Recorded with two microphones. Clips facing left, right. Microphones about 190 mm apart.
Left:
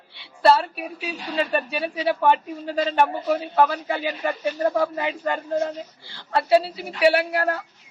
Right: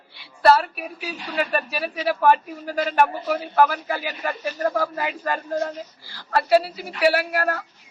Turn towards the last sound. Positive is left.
turn(degrees=25)  # may be behind; listen again after turning